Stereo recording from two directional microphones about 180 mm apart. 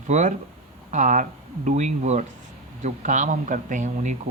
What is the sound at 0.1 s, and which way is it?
Speech, 45° right (ahead or behind).